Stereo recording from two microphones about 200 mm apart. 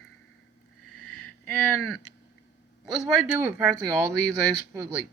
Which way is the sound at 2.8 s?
Centre (ahead or behind).